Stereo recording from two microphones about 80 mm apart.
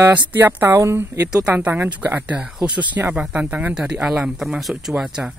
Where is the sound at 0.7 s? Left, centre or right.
Right.